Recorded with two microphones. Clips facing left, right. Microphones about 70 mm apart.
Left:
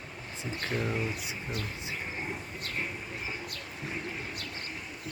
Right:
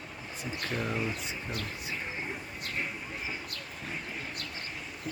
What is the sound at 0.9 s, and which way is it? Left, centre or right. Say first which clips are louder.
Speech: even; centre.